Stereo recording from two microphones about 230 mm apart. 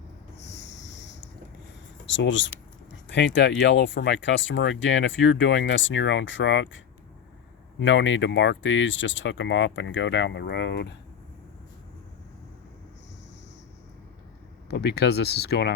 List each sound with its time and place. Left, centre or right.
0.4 s a sound: left
2.0 s speech: left
14.7 s speech: left